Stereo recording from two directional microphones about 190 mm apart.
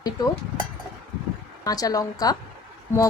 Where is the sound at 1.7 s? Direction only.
20° left (ahead or behind).